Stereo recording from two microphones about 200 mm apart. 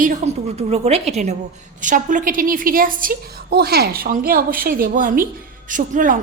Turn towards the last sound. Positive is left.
turn(degrees=-40)  # may be behind; listen again after turning